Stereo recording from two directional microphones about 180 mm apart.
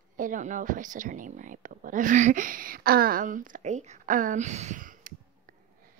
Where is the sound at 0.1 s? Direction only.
45° right (ahead or behind).